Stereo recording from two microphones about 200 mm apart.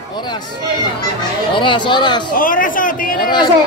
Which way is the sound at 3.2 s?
20° left (ahead or behind).